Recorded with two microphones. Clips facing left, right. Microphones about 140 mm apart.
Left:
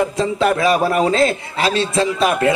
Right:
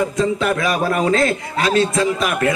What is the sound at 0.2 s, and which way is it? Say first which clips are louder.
A man's voice: left 3 dB; 30° left (ahead or behind).